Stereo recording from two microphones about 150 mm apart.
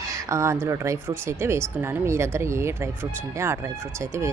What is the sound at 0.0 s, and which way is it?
A woman's voice, 20° right (ahead or behind).